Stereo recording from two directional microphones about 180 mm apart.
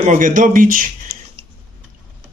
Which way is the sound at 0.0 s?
45° right (ahead or behind).